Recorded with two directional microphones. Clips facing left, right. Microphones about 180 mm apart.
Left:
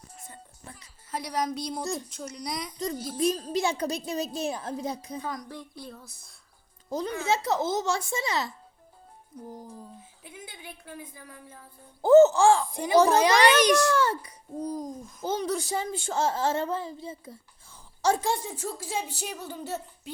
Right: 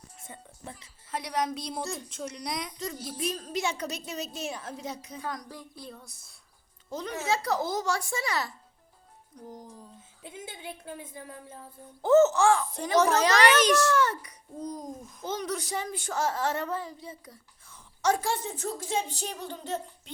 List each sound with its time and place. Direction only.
0.3 s speech: 25° right (ahead or behind)
1.1 s hoot: centre (ahead or behind)
2.7 s a woman's voice: 35° left (ahead or behind)
5.2 s hoot: centre (ahead or behind)
6.9 s a woman's voice: 35° left (ahead or behind)
7.3 s a woman's voice: 25° left (ahead or behind)
9.3 s speech: 5° left (ahead or behind)
10.2 s a woman's voice: 25° right (ahead or behind)
12.0 s a woman's voice: 30° left (ahead or behind)
12.7 s speech: 10° left (ahead or behind)
13.9 s a woman's voice: 30° left (ahead or behind)
14.6 s hoot: 5° left (ahead or behind)
15.3 s a woman's voice: 30° left (ahead or behind)
18.3 s speech: 10° left (ahead or behind)